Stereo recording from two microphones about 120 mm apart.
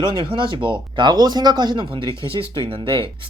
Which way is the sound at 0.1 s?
45° right (ahead or behind).